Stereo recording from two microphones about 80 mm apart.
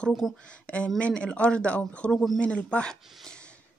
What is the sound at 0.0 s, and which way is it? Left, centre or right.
A woman's voice, centre.